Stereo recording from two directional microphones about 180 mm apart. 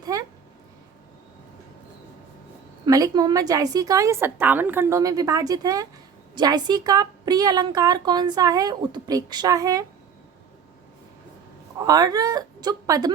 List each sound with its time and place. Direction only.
0.0 s a sound: 20° right (ahead or behind)
2.8 s speech: 20° right (ahead or behind)
11.9 s speech: 20° right (ahead or behind)